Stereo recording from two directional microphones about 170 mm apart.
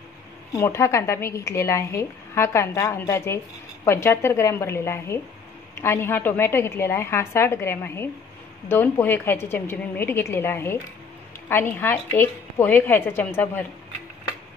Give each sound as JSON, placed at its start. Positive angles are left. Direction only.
{"t": 0.5, "sound": "a woman's voice", "side_deg": 20}